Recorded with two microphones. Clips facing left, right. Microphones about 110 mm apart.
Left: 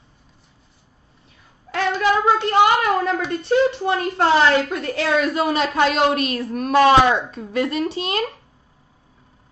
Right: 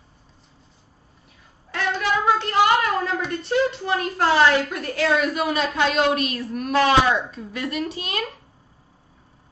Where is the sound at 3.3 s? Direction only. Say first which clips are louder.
Left 5 dB; 25° left (ahead or behind).